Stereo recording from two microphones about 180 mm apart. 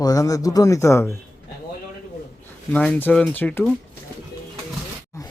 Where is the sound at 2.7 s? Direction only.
10° left (ahead or behind).